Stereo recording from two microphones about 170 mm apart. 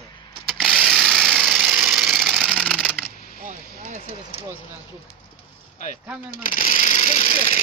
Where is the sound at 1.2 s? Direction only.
5° right (ahead or behind).